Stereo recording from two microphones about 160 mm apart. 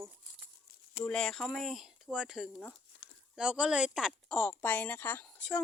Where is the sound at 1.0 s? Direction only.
5° left (ahead or behind).